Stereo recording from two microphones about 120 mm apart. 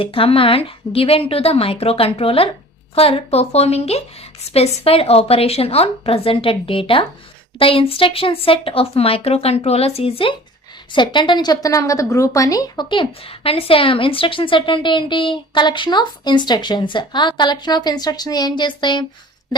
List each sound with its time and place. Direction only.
0.0 s a woman's voice: 50° left (ahead or behind)
10.9 s a woman's voice: 40° left (ahead or behind)